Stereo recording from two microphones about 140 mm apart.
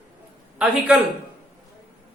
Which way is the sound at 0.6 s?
10° right (ahead or behind).